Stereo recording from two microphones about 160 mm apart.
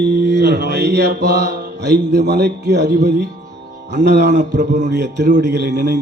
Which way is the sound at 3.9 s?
90° right.